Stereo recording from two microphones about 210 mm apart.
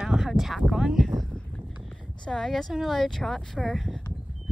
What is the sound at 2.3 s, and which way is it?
Speech, centre (ahead or behind).